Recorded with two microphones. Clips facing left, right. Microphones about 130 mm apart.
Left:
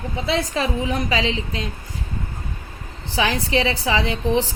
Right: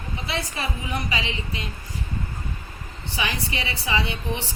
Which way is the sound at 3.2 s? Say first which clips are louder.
Left 9 dB; 90° left.